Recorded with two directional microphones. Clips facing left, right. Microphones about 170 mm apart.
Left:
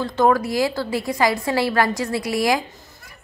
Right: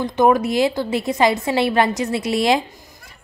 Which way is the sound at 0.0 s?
20° right (ahead or behind).